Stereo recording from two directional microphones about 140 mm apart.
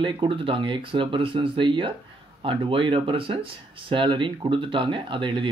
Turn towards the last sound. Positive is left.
turn(degrees=-35)  # may be behind; listen again after turning